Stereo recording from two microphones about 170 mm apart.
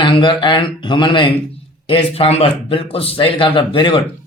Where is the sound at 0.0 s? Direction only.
30° left (ahead or behind).